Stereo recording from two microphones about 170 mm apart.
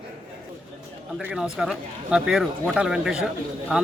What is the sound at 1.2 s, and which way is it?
Speech, 5° right (ahead or behind).